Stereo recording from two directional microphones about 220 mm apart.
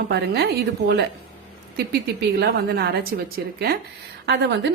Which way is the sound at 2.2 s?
45° right (ahead or behind).